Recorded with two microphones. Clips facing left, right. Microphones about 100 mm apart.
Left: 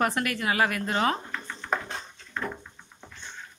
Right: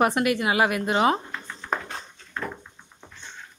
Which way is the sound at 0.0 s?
20° right (ahead or behind).